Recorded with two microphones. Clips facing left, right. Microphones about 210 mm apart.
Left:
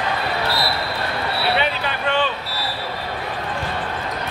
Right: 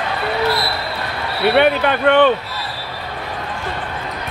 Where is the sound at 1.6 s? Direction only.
60° right (ahead or behind).